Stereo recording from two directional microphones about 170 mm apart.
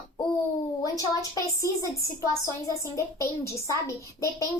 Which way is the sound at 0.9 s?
20° left (ahead or behind).